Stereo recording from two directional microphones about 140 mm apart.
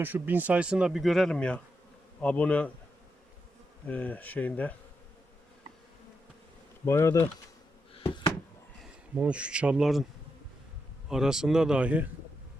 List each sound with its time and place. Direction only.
0.0 s speech: 15° right (ahead or behind); by 2.7 s 10° left (ahead or behind)
3.8 s speech: 10° left (ahead or behind)
6.8 s bee: 20° left (ahead or behind)
7.9 s a sound: 40° left (ahead or behind)
8.8 s speech: 10° right (ahead or behind)
11.1 s speech: 5° right (ahead or behind)